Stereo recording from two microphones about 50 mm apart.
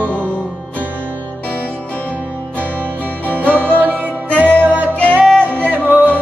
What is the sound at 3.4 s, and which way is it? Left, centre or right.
Music, right.